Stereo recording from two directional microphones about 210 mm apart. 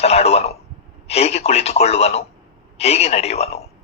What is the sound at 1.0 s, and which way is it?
Speech, 30° left (ahead or behind).